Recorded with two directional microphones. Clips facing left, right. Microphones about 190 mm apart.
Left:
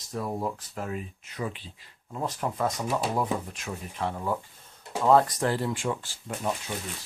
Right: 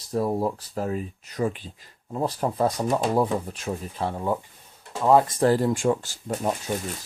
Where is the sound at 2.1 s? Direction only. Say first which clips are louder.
Right 5 dB; 35° right (ahead or behind).